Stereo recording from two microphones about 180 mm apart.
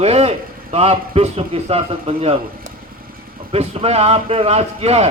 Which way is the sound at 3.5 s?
35° right (ahead or behind).